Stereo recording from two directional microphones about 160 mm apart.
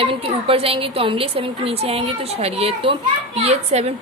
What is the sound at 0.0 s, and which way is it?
A woman's voice, 35° right (ahead or behind).